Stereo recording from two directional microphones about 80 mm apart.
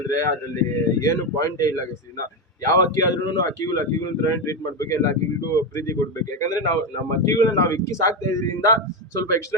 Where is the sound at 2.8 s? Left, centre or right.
Left.